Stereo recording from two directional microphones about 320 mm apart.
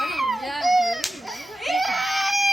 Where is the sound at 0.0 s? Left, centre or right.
Centre.